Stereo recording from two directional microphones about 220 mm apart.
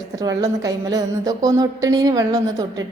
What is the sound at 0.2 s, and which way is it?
A woman's voice, 15° right (ahead or behind).